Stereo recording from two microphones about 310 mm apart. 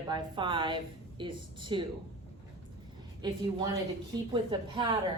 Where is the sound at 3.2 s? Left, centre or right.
Centre.